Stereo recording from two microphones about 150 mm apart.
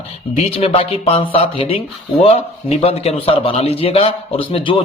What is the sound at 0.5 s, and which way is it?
A man's voice, 40° left (ahead or behind).